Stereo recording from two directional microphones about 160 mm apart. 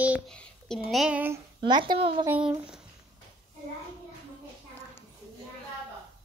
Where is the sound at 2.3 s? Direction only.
10° right (ahead or behind).